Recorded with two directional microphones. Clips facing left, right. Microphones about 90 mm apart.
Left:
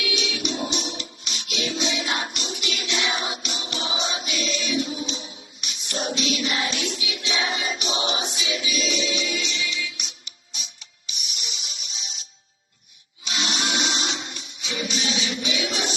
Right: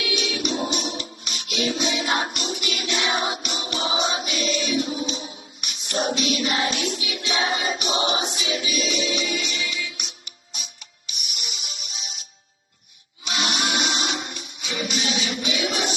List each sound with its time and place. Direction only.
0.0 s music: 35° right (ahead or behind)
13.2 s music: 45° right (ahead or behind)